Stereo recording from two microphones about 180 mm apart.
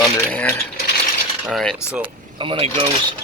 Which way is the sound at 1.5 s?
Centre (ahead or behind).